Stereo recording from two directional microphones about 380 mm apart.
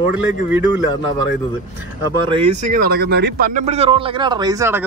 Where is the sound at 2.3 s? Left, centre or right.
Centre.